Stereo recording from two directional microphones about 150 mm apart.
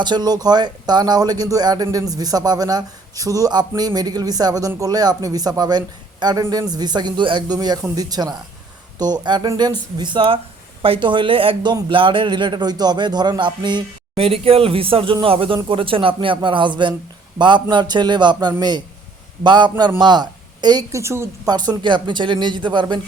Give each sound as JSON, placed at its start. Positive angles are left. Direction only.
{"t": 0.0, "sound": "a man's voice", "side_deg": -30}